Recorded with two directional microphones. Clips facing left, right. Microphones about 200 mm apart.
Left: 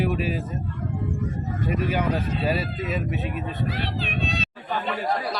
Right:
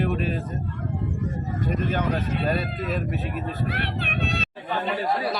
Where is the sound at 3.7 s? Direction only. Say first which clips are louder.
Even; 60° right (ahead or behind).